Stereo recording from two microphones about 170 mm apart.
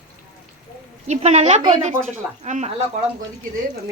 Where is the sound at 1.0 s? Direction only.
40° right (ahead or behind).